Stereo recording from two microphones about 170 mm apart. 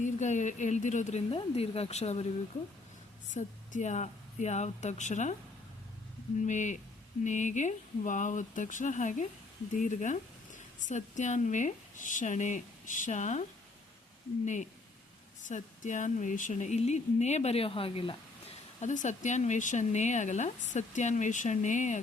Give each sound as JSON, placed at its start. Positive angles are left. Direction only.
{"t": 0.0, "sound": "speech", "side_deg": 45}
{"t": 3.3, "sound": "speech", "side_deg": 45}
{"t": 6.4, "sound": "speech", "side_deg": 45}
{"t": 14.4, "sound": "speech", "side_deg": 45}
{"t": 18.8, "sound": "speech", "side_deg": 45}